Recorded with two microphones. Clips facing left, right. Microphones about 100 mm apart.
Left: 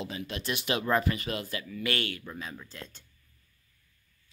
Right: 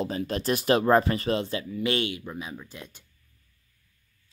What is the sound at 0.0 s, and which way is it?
Speech, 40° right (ahead or behind).